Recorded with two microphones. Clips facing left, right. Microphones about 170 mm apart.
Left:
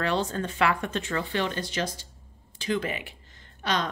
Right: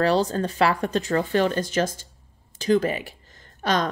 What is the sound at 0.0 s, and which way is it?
A woman's voice, 35° right (ahead or behind).